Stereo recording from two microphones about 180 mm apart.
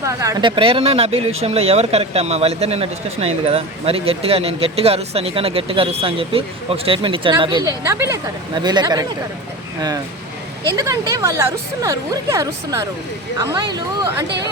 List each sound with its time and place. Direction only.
0.0 s speech: 15° right (ahead or behind)
10.8 s speech: 20° right (ahead or behind)